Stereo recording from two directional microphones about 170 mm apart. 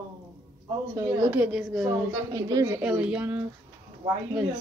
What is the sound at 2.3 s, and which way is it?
Speech, 20° right (ahead or behind).